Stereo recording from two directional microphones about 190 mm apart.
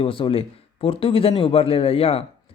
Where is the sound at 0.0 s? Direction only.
30° left (ahead or behind).